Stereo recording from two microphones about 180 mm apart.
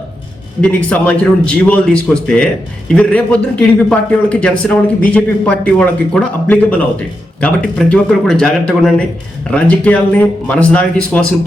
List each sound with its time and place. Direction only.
0.6 s a man's voice: 5° left (ahead or behind)